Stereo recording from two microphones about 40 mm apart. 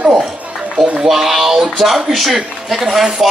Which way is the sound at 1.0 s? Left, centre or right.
Centre.